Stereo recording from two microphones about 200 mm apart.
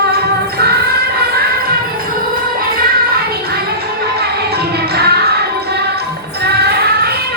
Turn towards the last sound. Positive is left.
turn(degrees=-50)  # may be behind; listen again after turning